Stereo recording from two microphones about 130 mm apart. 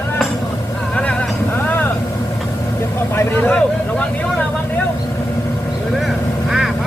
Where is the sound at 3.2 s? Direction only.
15° left (ahead or behind).